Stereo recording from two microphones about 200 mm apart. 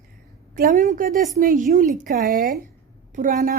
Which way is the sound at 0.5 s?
40° right (ahead or behind).